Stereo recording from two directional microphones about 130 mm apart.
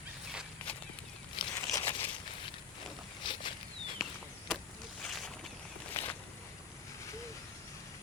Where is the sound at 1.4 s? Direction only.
40° left (ahead or behind).